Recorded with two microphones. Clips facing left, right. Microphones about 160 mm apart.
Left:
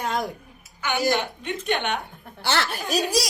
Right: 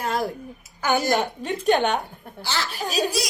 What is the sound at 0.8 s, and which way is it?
A woman's voice, 40° right (ahead or behind).